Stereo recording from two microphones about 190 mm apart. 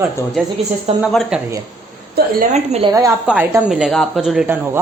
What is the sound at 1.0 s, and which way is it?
Speech, centre (ahead or behind).